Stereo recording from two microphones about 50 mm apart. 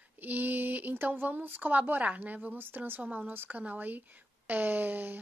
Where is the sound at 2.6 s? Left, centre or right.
Right.